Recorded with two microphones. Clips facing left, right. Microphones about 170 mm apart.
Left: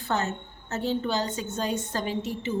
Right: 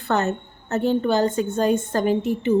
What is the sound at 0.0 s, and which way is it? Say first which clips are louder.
A woman's voice: right 6 dB; 60° right (ahead or behind).